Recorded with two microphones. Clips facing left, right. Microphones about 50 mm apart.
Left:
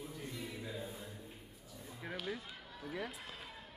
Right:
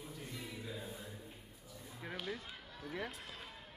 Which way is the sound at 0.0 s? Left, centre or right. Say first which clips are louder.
Left 2 dB; centre.